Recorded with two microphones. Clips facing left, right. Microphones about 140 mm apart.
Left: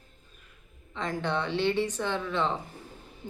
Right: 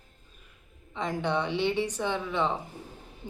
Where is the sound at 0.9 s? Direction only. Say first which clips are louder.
Right 1 dB; 15° right (ahead or behind).